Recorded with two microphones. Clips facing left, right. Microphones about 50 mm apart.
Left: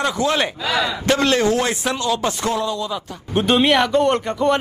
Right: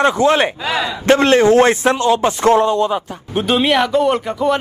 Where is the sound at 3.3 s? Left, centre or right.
Centre.